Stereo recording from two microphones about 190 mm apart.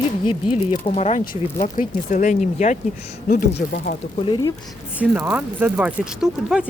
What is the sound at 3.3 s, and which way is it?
Speech, 50° left (ahead or behind).